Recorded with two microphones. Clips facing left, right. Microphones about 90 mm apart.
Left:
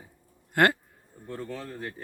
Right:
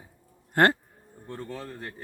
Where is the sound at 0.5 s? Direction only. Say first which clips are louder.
Right 1 dB; 35° right (ahead or behind).